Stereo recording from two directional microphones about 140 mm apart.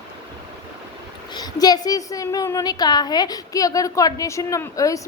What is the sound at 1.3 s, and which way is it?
A woman's voice, 30° left (ahead or behind).